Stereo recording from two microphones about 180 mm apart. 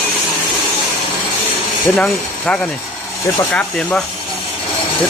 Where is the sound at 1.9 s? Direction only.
5° left (ahead or behind).